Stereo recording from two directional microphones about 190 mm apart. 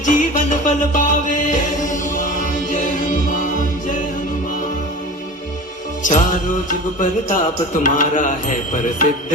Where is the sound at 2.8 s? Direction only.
40° left (ahead or behind).